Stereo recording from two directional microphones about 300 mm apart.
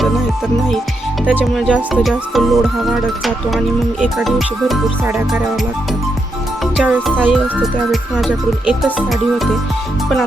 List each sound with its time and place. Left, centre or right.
1.3 s speech: centre
6.7 s speech: centre